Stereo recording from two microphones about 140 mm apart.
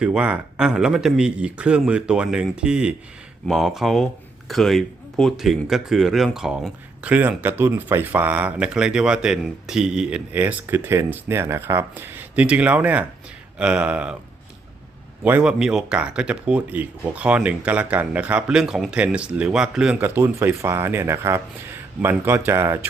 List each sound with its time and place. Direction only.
0.0 s speech: 10° right (ahead or behind)
15.2 s speech: 10° right (ahead or behind)